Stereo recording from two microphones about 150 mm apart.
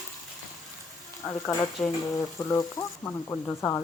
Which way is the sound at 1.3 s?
25° left (ahead or behind).